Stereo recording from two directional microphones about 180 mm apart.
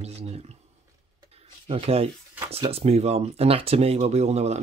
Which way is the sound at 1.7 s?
35° right (ahead or behind).